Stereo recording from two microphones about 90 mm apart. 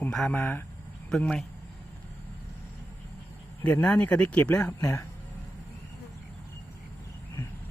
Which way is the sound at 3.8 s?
15° left (ahead or behind).